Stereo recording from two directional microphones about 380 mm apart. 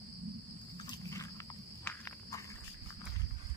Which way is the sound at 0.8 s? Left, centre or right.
Centre.